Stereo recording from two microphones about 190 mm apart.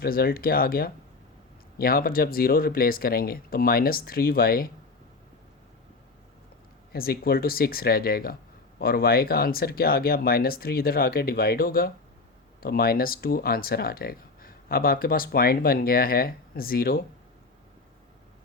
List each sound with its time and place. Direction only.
0.0 s speech: 50° left (ahead or behind)
6.9 s speech: 50° left (ahead or behind)